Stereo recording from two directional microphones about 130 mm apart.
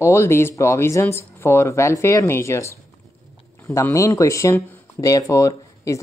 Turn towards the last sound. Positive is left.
turn(degrees=25)  # may be behind; listen again after turning